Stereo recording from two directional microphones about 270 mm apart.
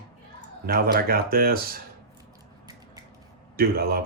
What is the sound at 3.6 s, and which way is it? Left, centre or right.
Speech, right.